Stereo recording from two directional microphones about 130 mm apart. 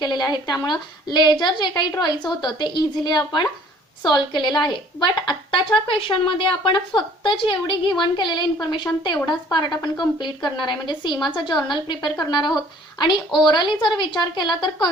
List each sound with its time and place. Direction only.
0.0 s a woman's voice: 35° left (ahead or behind)